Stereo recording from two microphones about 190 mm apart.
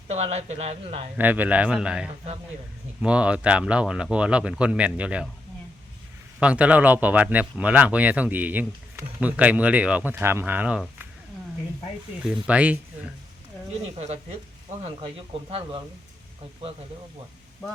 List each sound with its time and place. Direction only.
0.1 s speech: 35° right (ahead or behind)
1.1 s speech: 10° right (ahead or behind)
6.4 s speech: 5° right (ahead or behind)
12.2 s speech: 5° right (ahead or behind)
13.9 s speech: 35° right (ahead or behind)